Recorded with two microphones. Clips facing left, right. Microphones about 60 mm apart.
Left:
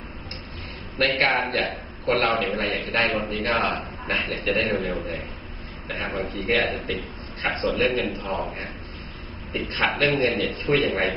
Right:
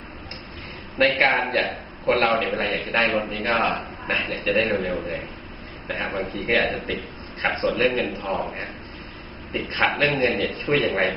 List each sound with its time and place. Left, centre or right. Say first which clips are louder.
1.1 s a man's voice: left 1 dB; right
1.4 s a man's voice: right 2 dB; centre
7.7 s a man's voice: right 1 dB; centre
9.5 s a man's voice: right 2 dB; centre